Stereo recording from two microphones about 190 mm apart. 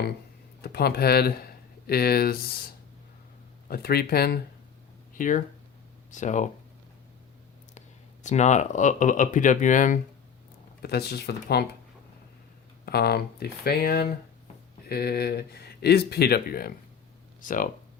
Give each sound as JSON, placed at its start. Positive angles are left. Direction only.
{"t": 0.6, "sound": "speech", "side_deg": 55}
{"t": 5.1, "sound": "speech", "side_deg": 45}
{"t": 7.7, "sound": "speech", "side_deg": 40}
{"t": 10.8, "sound": "speech", "side_deg": 60}
{"t": 12.8, "sound": "speech", "side_deg": 55}